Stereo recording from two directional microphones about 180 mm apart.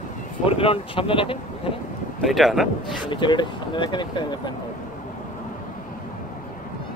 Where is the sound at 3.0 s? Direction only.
25° left (ahead or behind).